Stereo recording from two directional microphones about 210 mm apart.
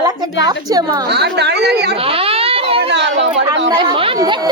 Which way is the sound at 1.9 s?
25° right (ahead or behind).